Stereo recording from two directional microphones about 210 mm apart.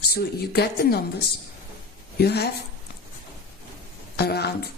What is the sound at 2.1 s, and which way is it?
Speech, 50° left (ahead or behind).